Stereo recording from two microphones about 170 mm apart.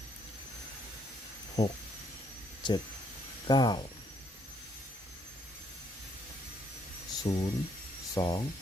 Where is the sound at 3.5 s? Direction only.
25° left (ahead or behind).